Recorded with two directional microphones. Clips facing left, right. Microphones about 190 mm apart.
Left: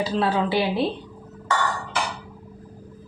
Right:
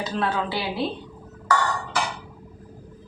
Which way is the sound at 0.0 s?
30° left (ahead or behind).